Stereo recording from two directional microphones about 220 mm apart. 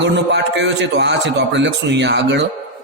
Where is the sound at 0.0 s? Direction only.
55° right (ahead or behind).